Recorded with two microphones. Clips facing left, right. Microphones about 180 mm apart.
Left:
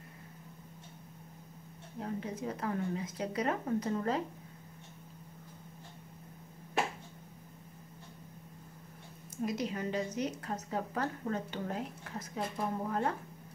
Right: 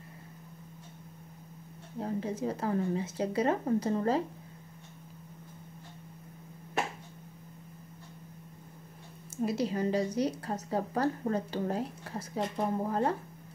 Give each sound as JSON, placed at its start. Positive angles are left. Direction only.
{"t": 2.0, "sound": "a woman's voice", "side_deg": -30}
{"t": 9.4, "sound": "a woman's voice", "side_deg": -30}